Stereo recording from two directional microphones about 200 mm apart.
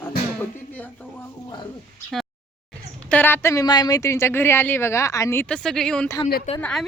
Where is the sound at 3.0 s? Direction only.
10° left (ahead or behind).